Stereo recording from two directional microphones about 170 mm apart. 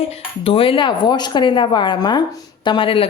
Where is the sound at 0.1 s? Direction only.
35° left (ahead or behind).